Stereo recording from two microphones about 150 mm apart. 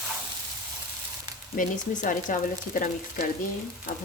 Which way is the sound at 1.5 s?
60° left (ahead or behind).